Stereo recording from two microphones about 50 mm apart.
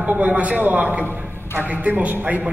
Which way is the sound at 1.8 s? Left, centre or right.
Right.